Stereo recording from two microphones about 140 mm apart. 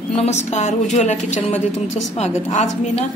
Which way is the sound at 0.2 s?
55° left (ahead or behind).